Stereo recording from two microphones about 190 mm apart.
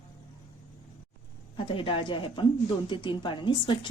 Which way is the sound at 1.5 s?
25° left (ahead or behind).